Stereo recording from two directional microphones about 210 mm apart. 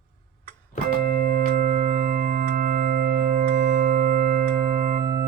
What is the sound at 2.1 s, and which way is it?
Music, 45° right (ahead or behind).